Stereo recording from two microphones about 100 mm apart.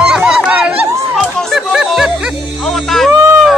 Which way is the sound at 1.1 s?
Centre (ahead or behind).